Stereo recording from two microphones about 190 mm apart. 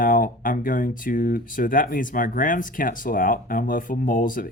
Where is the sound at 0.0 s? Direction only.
45° left (ahead or behind).